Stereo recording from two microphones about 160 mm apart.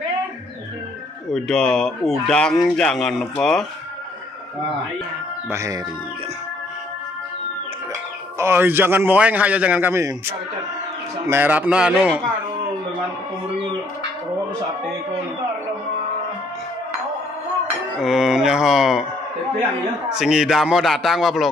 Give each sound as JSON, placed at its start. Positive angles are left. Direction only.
{"t": 1.3, "sound": "speech", "side_deg": 5}
{"t": 5.5, "sound": "speech", "side_deg": -20}
{"t": 8.4, "sound": "a man's voice", "side_deg": -15}
{"t": 17.9, "sound": "speech", "side_deg": 0}
{"t": 20.1, "sound": "speech", "side_deg": -5}